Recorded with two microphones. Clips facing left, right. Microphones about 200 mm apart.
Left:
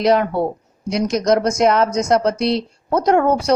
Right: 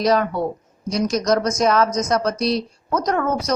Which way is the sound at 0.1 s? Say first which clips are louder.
Left 3 dB; 25° left (ahead or behind).